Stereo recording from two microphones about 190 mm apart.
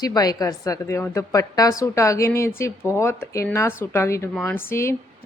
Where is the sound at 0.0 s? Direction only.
20° left (ahead or behind).